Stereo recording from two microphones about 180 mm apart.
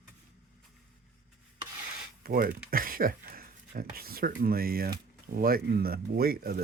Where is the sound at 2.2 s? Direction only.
55° right (ahead or behind).